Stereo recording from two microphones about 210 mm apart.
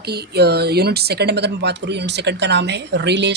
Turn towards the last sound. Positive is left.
turn(degrees=-55)  # may be behind; listen again after turning